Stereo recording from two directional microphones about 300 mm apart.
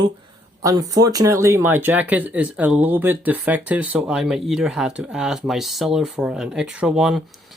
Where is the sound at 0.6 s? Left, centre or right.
Centre.